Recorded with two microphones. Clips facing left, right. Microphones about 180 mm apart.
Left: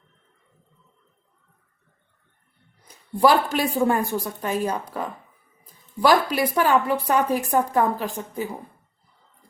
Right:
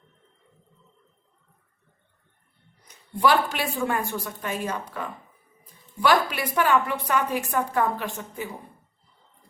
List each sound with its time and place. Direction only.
2.8 s speech: 40° left (ahead or behind)